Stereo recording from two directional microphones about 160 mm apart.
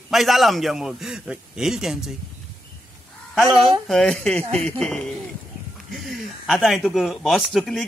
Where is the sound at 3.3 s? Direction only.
5° right (ahead or behind).